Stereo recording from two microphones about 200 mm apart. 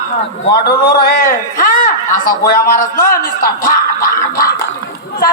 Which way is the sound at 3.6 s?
45° left (ahead or behind).